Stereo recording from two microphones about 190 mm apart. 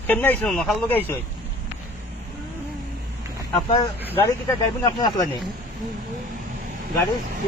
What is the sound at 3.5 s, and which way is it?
Speech, 25° left (ahead or behind).